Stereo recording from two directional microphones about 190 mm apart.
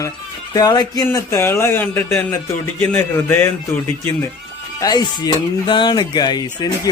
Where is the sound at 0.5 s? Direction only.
20° left (ahead or behind).